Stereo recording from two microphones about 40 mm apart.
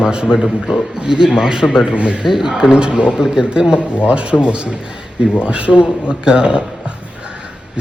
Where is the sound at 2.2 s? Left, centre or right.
Centre.